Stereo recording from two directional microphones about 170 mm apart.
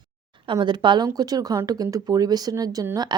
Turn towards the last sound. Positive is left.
turn(degrees=-20)  # may be behind; listen again after turning